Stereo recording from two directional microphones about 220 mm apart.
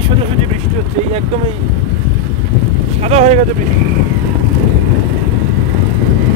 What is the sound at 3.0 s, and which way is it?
Speech, 30° right (ahead or behind).